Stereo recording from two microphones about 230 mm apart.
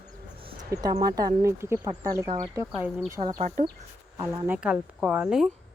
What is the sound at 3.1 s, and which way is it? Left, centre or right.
Speech, centre.